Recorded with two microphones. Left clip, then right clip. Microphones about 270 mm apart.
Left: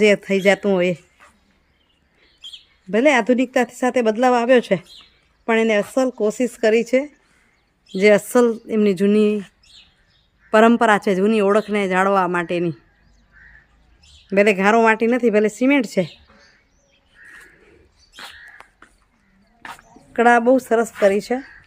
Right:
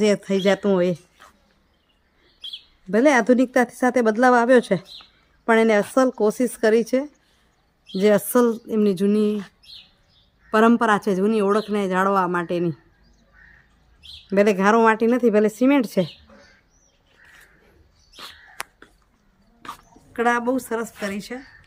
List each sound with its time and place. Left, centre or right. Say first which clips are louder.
0.0 s speech: left 4 dB; centre
2.9 s speech: left 1 dB; centre
10.5 s speech: left 4 dB; centre
14.3 s speech: left 2 dB; centre
20.1 s a woman's voice: left 7 dB; centre